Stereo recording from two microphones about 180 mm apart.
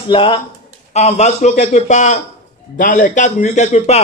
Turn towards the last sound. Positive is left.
turn(degrees=40)  # may be behind; listen again after turning